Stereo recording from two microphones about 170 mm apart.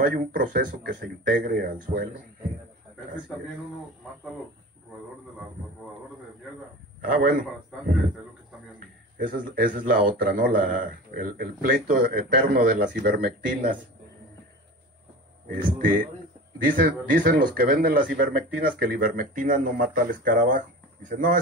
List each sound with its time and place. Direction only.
0.0 s speech: 55° right (ahead or behind)
7.0 s speech: 60° right (ahead or behind)
9.2 s a man's voice: 55° right (ahead or behind)
15.4 s a man's voice: 55° right (ahead or behind)